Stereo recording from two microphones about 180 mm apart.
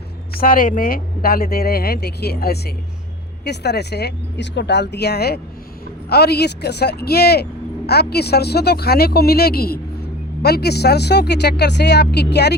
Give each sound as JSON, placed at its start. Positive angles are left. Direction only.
{"t": 0.3, "sound": "speech", "side_deg": 50}